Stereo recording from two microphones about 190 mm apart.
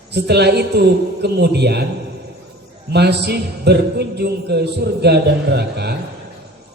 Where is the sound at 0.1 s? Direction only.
60° right (ahead or behind).